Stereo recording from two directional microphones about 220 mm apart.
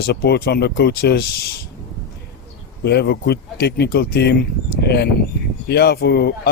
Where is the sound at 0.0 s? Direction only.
45° left (ahead or behind).